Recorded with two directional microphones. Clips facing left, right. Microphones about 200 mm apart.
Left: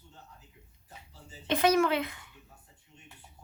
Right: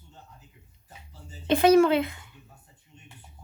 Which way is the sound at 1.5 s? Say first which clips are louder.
Right 7 dB; 30° right (ahead or behind).